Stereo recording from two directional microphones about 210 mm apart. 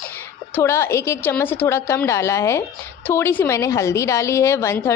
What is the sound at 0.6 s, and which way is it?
A woman's voice, 15° left (ahead or behind).